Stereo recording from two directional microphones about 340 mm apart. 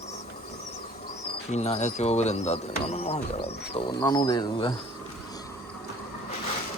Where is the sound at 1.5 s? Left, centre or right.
Centre.